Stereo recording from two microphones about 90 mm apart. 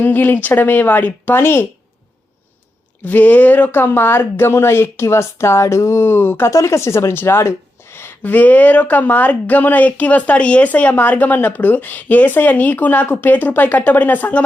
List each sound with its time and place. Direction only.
0.0 s a woman's voice: 20° left (ahead or behind)
3.0 s a woman's voice: 20° left (ahead or behind)